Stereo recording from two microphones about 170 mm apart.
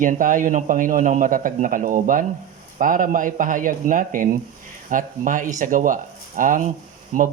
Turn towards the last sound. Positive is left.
turn(degrees=-55)  # may be behind; listen again after turning